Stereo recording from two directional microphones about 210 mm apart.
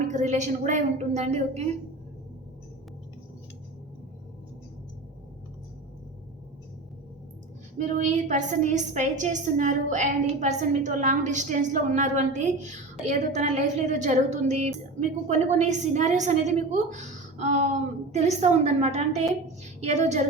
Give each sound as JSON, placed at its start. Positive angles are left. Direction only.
{"t": 0.0, "sound": "a woman's voice", "side_deg": -35}
{"t": 7.8, "sound": "a woman's voice", "side_deg": -35}